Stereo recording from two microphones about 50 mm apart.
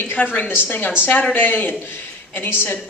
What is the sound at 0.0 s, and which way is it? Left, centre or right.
A woman's voice, left.